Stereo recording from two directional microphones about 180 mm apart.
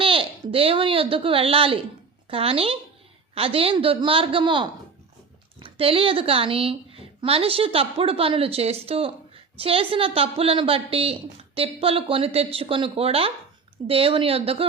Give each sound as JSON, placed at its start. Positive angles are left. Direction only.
{"t": 0.0, "sound": "a woman's voice", "side_deg": -30}